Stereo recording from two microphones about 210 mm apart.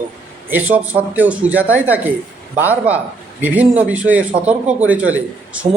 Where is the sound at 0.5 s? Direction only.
5° right (ahead or behind).